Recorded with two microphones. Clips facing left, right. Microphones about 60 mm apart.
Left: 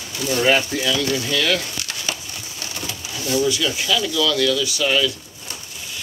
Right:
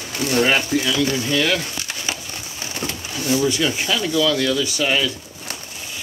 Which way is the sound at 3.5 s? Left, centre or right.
Right.